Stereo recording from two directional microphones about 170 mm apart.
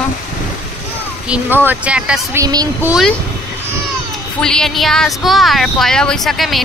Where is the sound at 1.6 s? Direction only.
5° right (ahead or behind).